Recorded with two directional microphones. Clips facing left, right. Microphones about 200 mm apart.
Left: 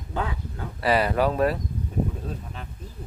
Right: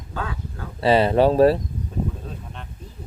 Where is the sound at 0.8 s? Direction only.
25° right (ahead or behind).